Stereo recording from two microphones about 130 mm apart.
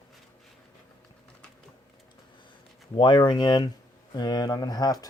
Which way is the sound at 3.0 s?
35° left (ahead or behind).